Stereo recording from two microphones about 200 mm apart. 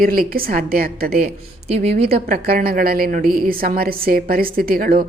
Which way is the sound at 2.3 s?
50° right (ahead or behind).